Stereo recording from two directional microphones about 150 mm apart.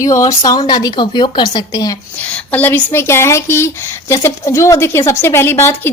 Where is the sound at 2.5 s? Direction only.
10° left (ahead or behind).